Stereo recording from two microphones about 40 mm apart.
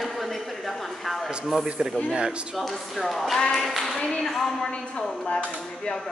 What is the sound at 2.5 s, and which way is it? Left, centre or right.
Speech, centre.